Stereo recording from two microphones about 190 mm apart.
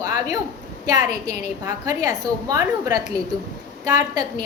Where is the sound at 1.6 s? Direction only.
15° right (ahead or behind).